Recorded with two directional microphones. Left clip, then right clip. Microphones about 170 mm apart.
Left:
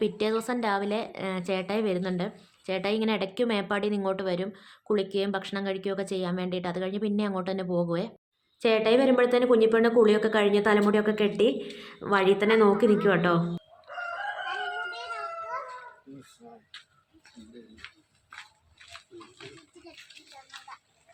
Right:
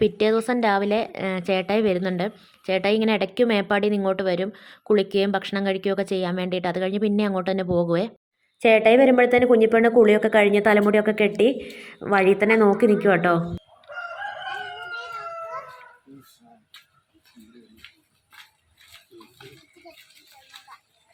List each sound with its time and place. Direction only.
0.0 s a woman's voice: 30° right (ahead or behind)